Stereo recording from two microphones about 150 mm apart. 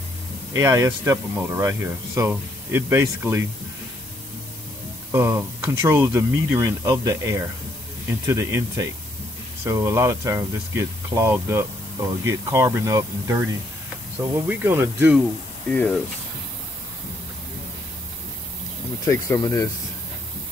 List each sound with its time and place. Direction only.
0.6 s speech: 20° right (ahead or behind)
5.1 s speech: 15° right (ahead or behind)
15.7 s speech: 10° left (ahead or behind)
19.0 s speech: 20° left (ahead or behind)